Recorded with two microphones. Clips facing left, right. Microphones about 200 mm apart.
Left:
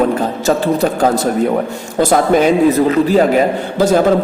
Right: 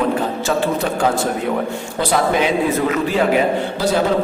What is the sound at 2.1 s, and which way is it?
A man's voice, 45° left (ahead or behind).